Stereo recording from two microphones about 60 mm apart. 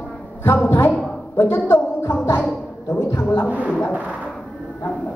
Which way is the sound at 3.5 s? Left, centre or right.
Right.